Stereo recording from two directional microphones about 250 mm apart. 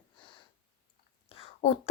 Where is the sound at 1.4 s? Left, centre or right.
Left.